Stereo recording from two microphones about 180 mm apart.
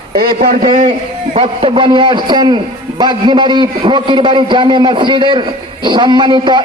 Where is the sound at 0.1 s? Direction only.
55° right (ahead or behind).